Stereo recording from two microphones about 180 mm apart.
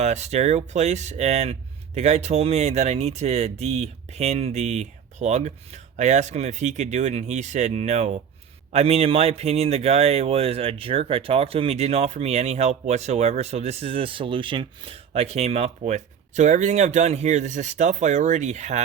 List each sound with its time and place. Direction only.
0.0 s speech: 40° right (ahead or behind)